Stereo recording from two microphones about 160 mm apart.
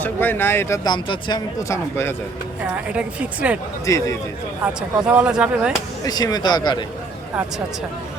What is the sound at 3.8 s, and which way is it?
Speech, 20° left (ahead or behind).